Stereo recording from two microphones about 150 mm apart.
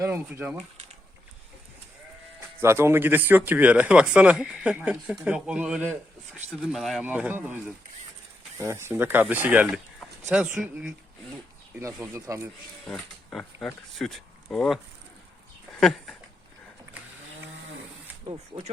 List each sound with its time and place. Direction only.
0.1 s speech: 10° right (ahead or behind)
2.6 s speech: 15° right (ahead or behind); by 7.1 s centre (ahead or behind)
7.1 s speech: 10° right (ahead or behind)
8.5 s speech: 20° right (ahead or behind)
11.8 s speech: 20° right (ahead or behind)
12.9 s speech: 5° left (ahead or behind)
15.8 s speech: 5° left (ahead or behind)
18.5 s speech: 35° right (ahead or behind)